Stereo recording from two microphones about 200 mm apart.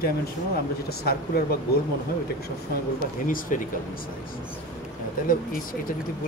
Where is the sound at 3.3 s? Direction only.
45° left (ahead or behind).